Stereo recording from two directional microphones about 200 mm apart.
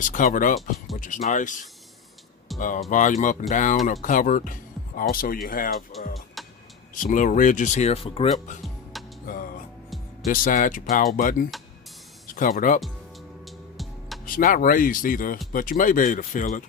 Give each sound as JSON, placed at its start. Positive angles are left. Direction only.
{"t": 0.0, "sound": "speech", "side_deg": 40}
{"t": 2.6, "sound": "speech", "side_deg": 40}
{"t": 5.9, "sound": "speech", "side_deg": 0}
{"t": 6.4, "sound": "vehicle", "side_deg": 0}
{"t": 6.9, "sound": "speech", "side_deg": 40}
{"t": 8.6, "sound": "music", "side_deg": 0}
{"t": 9.2, "sound": "music", "side_deg": 45}
{"t": 10.2, "sound": "speech", "side_deg": 45}
{"t": 13.4, "sound": "music", "side_deg": 0}
{"t": 14.3, "sound": "speech", "side_deg": 45}